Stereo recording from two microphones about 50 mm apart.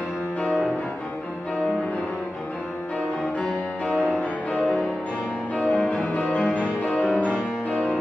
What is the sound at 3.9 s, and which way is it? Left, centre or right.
Music, centre.